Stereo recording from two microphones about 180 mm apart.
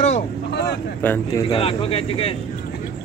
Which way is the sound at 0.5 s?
65° left (ahead or behind).